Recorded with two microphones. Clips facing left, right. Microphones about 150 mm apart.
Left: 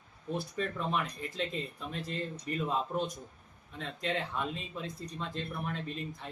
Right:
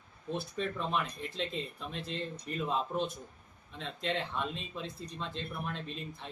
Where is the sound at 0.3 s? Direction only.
Centre (ahead or behind).